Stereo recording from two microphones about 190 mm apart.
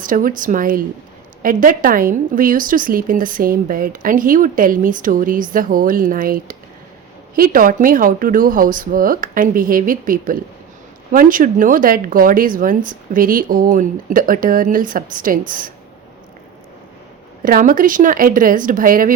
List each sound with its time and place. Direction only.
0.0 s a woman's voice: 45° right (ahead or behind)
17.4 s a woman's voice: 50° right (ahead or behind)